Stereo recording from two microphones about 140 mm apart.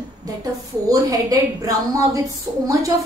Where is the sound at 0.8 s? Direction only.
25° right (ahead or behind).